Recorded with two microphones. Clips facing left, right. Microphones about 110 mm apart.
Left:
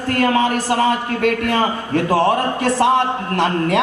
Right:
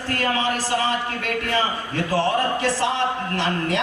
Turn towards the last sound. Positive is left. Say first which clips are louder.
# left 6 dB
turn(degrees=50)  # may be behind; listen again after turning